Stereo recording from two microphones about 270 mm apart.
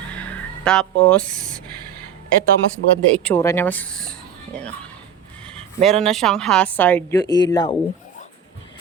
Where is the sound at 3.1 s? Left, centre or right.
Centre.